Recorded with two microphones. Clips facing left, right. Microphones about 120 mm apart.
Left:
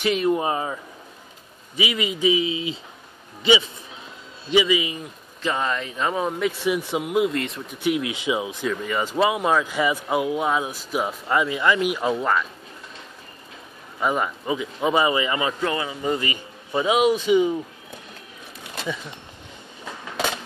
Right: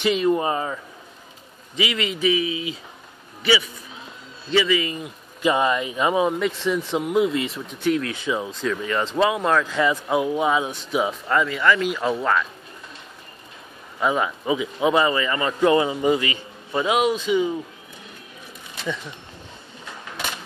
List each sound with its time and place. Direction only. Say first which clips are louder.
0.0 s speech: right 1 dB; centre (ahead or behind)
1.8 s a man's voice: even; 15° left (ahead or behind)
4.9 s speech: right 2 dB; 10° right (ahead or behind)
6.4 s speech: even; 10° left (ahead or behind)
7.8 s speech: right 1 dB; 10° left (ahead or behind)
8.6 s speech: right 3 dB; 5° left (ahead or behind)
11.2 s speech: even; 15° left (ahead or behind)
12.1 s speech: right 3 dB; 5° left (ahead or behind)
13.9 s speech: right 1 dB; centre (ahead or behind)
15.0 s speech: even; 15° left (ahead or behind)
15.6 s a man's voice: right 8 dB; 25° right (ahead or behind)
16.8 s speech: left 2 dB; 5° left (ahead or behind)